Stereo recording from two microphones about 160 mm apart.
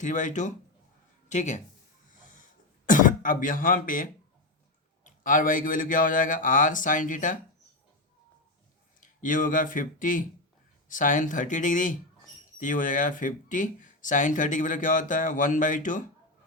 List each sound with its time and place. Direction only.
0.0 s speech: 50° left (ahead or behind)
2.3 s throat clearing: 55° left (ahead or behind)
5.0 s a man's voice: 55° left (ahead or behind)
9.0 s speech: 55° left (ahead or behind)